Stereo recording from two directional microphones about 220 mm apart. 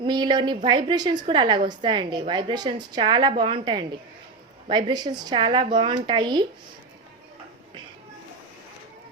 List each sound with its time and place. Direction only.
0.0 s a woman's voice: 20° right (ahead or behind)